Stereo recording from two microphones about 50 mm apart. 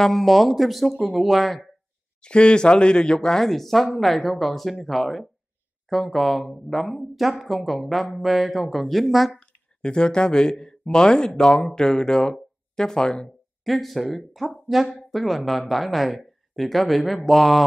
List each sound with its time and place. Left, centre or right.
0.0 s speech: centre
2.2 s speech: centre
3.4 s speech: centre
9.4 s speech: centre
13.7 s speech: centre